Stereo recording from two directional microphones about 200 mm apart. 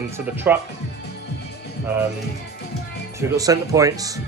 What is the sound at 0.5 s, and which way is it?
Speech, 10° right (ahead or behind).